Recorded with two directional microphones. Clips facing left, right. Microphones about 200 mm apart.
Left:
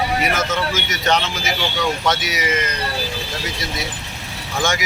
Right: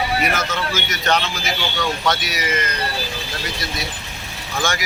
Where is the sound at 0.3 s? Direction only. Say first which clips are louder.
Left 2 dB; 20° left (ahead or behind).